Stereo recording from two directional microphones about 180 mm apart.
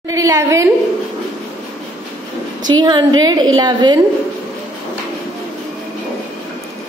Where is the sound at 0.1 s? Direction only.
20° right (ahead or behind).